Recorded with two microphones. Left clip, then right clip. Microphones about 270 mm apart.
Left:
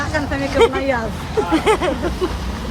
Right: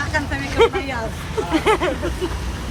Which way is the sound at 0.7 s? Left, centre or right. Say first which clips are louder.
Left 5 dB; left.